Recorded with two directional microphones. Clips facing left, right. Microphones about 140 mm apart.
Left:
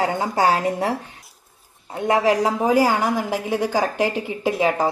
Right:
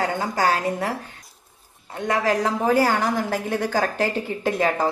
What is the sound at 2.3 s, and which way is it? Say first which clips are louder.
A woman's voice: left 2 dB; 10° left (ahead or behind).